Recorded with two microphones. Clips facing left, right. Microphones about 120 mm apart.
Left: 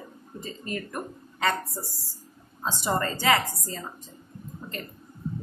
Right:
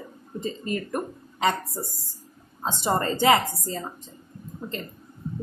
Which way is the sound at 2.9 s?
25° right (ahead or behind).